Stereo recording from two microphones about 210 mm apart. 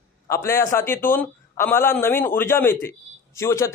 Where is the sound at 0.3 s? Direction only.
10° left (ahead or behind).